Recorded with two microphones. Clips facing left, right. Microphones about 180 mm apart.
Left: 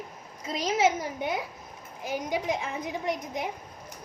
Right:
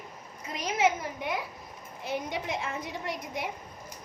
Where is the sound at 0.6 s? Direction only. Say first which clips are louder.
Left 2 dB; 30° left (ahead or behind).